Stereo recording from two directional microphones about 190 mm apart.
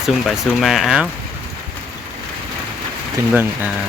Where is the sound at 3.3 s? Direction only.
10° right (ahead or behind).